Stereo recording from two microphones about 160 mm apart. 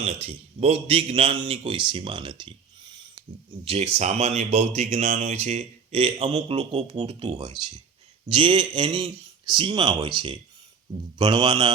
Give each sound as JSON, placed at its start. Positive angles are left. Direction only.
{"t": 0.0, "sound": "a man's voice", "side_deg": -40}